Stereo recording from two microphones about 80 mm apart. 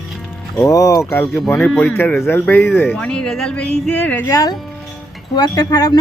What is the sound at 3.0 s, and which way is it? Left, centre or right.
Speech, centre.